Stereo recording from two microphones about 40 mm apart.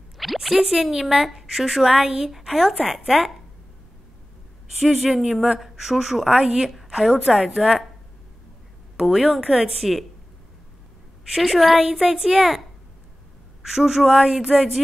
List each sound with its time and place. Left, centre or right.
0.2 s a sound: centre
0.6 s a woman's voice: centre
4.7 s a woman's voice: centre
6.4 s a woman's voice: centre
9.0 s a woman's voice: centre
11.3 s a woman's voice: centre